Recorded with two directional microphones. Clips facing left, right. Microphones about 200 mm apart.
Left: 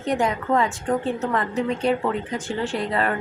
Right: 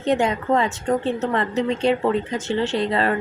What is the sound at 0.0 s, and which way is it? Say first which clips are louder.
A woman's voice: right 3 dB; 25° right (ahead or behind).